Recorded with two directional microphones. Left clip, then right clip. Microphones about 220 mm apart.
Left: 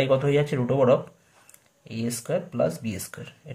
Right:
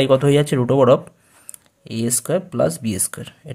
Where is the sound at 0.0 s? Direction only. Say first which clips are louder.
Right 7 dB; 40° right (ahead or behind).